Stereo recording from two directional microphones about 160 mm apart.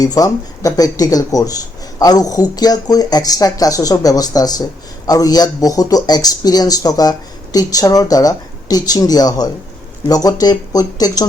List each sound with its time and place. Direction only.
0.0 s speech: 25° left (ahead or behind)